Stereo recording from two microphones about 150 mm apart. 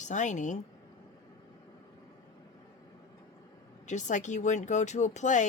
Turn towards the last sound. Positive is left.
turn(degrees=55)  # may be behind; listen again after turning